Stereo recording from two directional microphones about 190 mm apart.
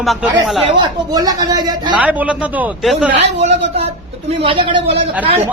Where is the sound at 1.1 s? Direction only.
20° right (ahead or behind).